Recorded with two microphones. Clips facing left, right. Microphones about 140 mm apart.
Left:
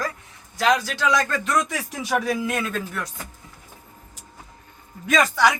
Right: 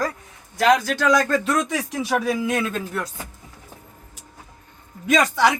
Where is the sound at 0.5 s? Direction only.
55° right (ahead or behind).